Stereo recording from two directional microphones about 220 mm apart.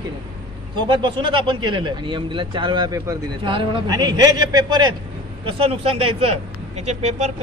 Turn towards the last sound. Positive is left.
turn(degrees=-30)  # may be behind; listen again after turning